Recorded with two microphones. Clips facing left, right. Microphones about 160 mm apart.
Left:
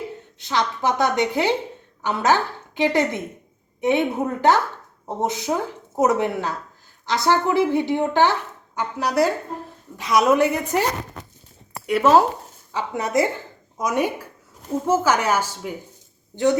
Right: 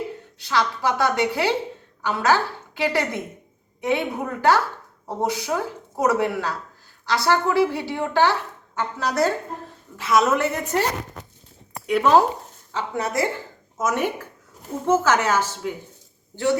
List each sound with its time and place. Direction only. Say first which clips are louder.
0.3 s a woman's voice: even; 20° left (ahead or behind)
11.9 s speech: left 1 dB; 5° left (ahead or behind)
12.7 s a woman's voice: left 3 dB; 15° left (ahead or behind)